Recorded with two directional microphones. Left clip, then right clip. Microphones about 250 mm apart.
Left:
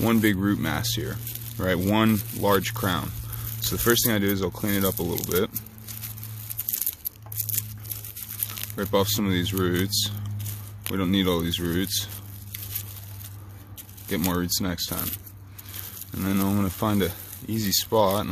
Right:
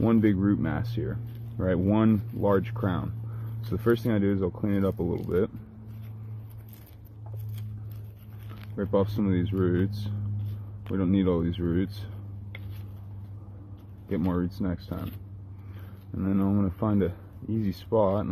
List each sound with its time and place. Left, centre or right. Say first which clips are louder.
0.0 s speech: left 2 dB; centre
8.5 s speech: left 2 dB; centre
14.0 s speech: left 3 dB; centre
16.2 s speech: left 2 dB; centre